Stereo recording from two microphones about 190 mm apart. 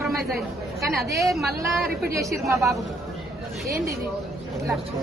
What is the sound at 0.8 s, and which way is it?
Speech, 15° right (ahead or behind).